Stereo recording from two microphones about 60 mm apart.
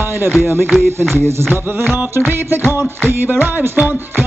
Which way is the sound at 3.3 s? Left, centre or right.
Right.